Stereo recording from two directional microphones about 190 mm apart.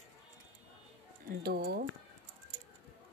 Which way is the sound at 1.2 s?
50° right (ahead or behind).